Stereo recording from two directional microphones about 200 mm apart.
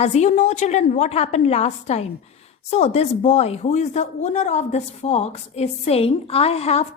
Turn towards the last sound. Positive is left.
turn(degrees=30)  # may be behind; listen again after turning